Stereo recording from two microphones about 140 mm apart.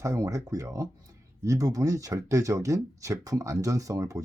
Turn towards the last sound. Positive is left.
turn(degrees=-20)  # may be behind; listen again after turning